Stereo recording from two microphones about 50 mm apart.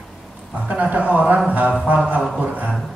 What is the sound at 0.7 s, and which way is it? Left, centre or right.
A man's voice, right.